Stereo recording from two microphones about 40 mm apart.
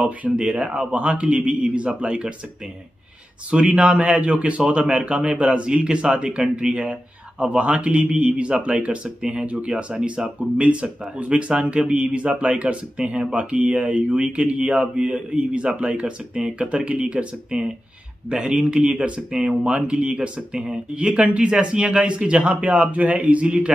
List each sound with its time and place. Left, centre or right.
0.4 s speech: right
3.4 s speech: right